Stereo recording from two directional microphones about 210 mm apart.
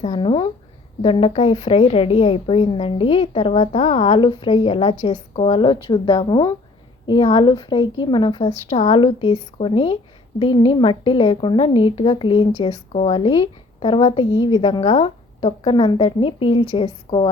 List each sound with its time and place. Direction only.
0.0 s a woman's voice: 25° left (ahead or behind)